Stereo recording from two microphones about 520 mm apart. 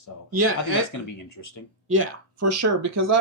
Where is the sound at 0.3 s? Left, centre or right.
Right.